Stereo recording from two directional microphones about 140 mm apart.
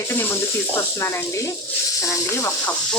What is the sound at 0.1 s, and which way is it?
Speech, 15° left (ahead or behind).